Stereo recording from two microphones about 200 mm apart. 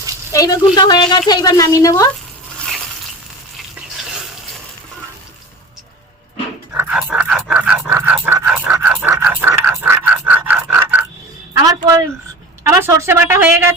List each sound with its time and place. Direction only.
0.3 s a woman's voice: 20° left (ahead or behind)
2.6 s crushing: centre (ahead or behind)
3.8 s stir: 5° right (ahead or behind)
6.7 s dog: 5° right (ahead or behind)
10.4 s a sound: 10° right (ahead or behind)